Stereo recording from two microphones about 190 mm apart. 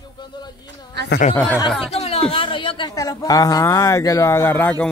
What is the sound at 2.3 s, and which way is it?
Speech, 30° left (ahead or behind).